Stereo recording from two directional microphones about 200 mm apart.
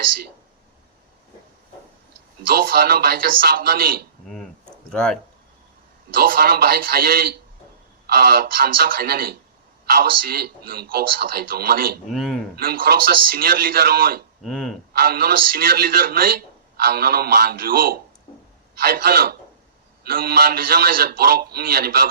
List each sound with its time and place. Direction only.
2.5 s a man's voice: 50° right (ahead or behind)
4.9 s speech: 5° left (ahead or behind)
6.1 s a man's voice: 50° right (ahead or behind)
12.1 s a man's voice: centre (ahead or behind)
12.5 s a man's voice: 45° right (ahead or behind)
14.4 s a man's voice: centre (ahead or behind)
14.9 s a man's voice: 50° right (ahead or behind)